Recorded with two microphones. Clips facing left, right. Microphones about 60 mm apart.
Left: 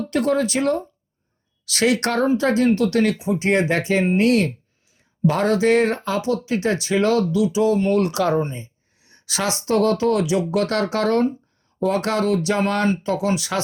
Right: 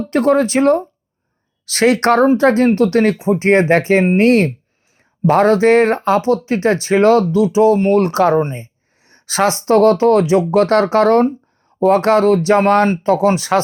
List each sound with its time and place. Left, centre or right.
0.1 s speech: right